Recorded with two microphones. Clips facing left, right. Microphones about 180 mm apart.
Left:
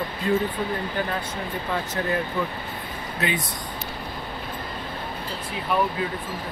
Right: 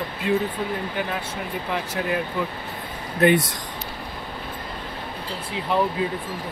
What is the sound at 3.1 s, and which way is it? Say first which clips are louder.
Speech: right 10 dB; 55° right (ahead or behind).